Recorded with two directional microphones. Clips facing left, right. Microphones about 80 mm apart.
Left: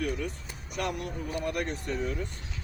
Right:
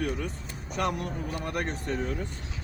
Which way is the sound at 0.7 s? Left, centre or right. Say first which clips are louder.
Right 3 dB; right.